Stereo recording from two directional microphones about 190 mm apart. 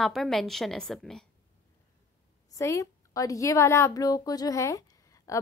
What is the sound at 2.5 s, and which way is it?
A woman's voice, 15° left (ahead or behind).